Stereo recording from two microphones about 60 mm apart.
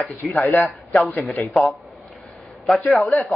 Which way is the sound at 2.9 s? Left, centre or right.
Centre.